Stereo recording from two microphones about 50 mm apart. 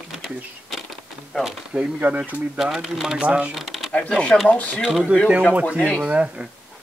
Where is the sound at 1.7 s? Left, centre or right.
Right.